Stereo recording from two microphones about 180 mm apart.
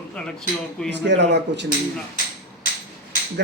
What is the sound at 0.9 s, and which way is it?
Speech, 75° right (ahead or behind).